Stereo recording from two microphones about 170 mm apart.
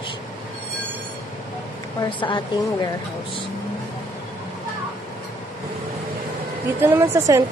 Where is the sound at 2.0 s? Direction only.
30° left (ahead or behind).